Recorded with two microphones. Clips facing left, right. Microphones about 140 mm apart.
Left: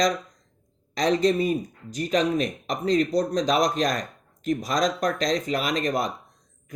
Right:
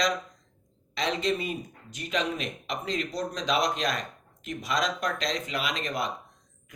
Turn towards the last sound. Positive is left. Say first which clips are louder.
# left 6 dB
turn(degrees=40)  # may be behind; listen again after turning